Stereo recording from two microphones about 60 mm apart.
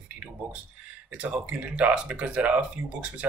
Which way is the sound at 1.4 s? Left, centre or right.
Right.